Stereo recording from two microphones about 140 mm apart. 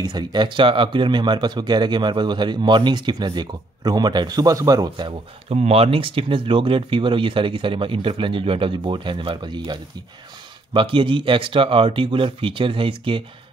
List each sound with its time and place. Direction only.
0.0 s speech: 30° right (ahead or behind)
5.6 s speech: 45° right (ahead or behind)